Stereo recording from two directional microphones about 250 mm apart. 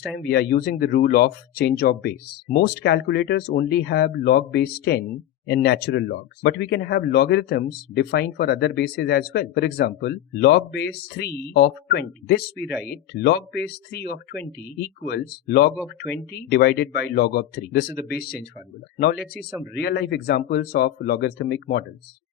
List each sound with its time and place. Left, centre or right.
0.2 s speech: left
13.6 s speech: left
19.7 s speech: left